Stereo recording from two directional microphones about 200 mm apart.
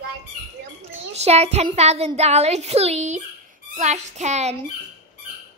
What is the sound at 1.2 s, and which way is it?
Speech, 30° right (ahead or behind).